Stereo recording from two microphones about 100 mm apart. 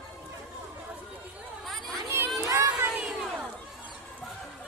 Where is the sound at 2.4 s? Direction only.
30° right (ahead or behind).